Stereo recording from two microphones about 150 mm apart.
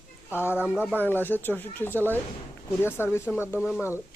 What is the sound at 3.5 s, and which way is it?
Speech, 10° right (ahead or behind).